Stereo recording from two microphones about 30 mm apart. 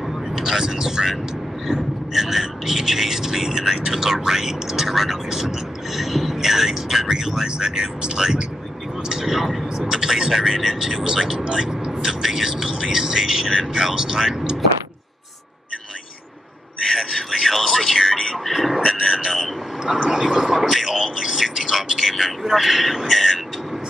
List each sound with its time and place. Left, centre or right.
0.4 s speech: centre
9.1 s speech: centre
16.9 s a sound: centre
18.8 s radio: centre
19.8 s vehicle: right
22.0 s speech: centre
23.1 s vehicle: centre